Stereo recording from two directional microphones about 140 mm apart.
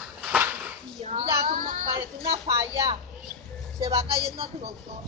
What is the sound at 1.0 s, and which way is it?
Child singing, 60° right (ahead or behind).